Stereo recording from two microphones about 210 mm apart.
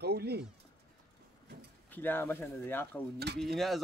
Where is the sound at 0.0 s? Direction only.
50° right (ahead or behind).